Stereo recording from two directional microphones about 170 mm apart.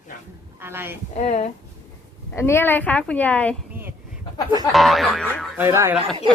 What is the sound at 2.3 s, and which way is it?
A woman's voice, 15° left (ahead or behind).